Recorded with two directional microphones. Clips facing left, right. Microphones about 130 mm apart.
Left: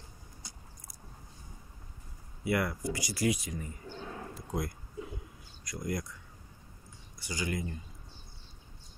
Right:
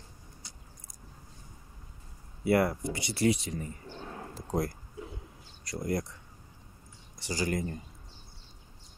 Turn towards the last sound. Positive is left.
turn(degrees=-40)  # may be behind; listen again after turning